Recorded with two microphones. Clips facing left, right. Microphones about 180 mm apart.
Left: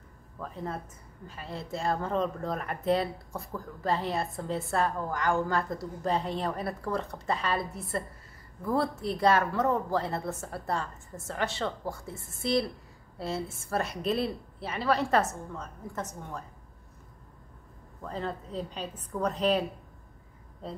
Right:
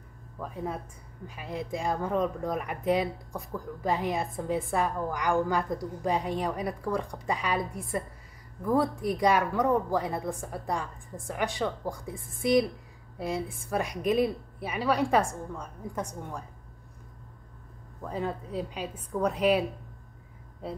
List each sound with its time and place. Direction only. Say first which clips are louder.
0.4 s a woman's voice: right 2 dB; 10° right (ahead or behind)
18.0 s a woman's voice: right 2 dB; 10° right (ahead or behind)